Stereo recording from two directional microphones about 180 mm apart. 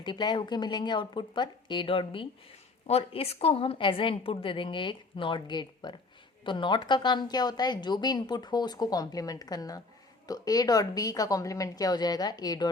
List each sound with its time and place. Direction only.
0.0 s a woman's voice: 25° left (ahead or behind)